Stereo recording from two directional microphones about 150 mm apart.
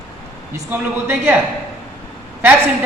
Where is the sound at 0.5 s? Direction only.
15° right (ahead or behind).